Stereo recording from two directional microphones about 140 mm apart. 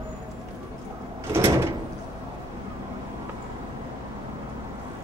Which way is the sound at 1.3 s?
20° right (ahead or behind).